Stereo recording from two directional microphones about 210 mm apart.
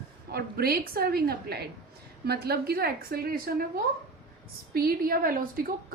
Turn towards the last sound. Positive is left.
turn(degrees=-40)  # may be behind; listen again after turning